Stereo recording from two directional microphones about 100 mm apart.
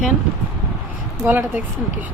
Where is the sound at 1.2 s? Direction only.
20° right (ahead or behind).